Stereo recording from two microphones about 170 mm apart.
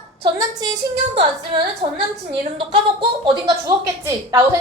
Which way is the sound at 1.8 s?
40° right (ahead or behind).